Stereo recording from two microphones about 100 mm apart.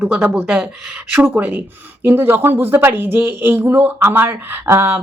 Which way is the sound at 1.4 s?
20° right (ahead or behind).